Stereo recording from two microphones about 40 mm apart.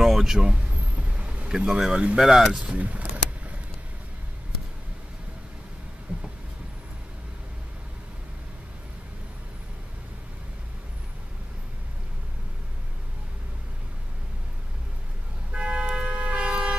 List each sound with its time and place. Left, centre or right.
0.0 s speech: centre
0.6 s vehicle: right
1.5 s speech: centre
2.6 s vehicle: right
6.1 s vehicle: right
15.5 s toot: right
16.1 s vehicle: right